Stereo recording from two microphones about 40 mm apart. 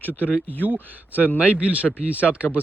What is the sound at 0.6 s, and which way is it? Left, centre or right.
Speech, right.